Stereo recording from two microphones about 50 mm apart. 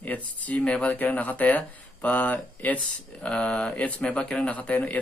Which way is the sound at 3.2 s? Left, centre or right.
Left.